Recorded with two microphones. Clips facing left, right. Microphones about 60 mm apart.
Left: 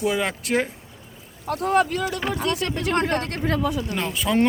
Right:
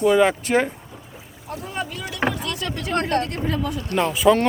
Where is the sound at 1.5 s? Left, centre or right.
Left.